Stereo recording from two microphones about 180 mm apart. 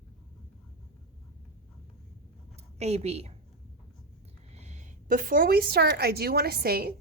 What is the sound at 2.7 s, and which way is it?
Speech, 35° right (ahead or behind).